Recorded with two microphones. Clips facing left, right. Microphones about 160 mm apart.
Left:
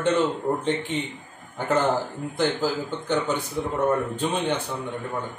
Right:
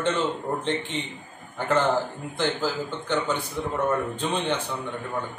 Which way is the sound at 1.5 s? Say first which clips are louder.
Even; 10° left (ahead or behind).